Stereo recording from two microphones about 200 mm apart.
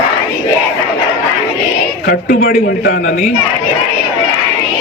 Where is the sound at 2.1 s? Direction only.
45° left (ahead or behind).